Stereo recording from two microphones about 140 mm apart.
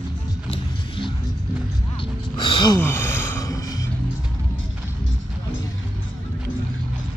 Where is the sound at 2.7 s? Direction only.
15° left (ahead or behind).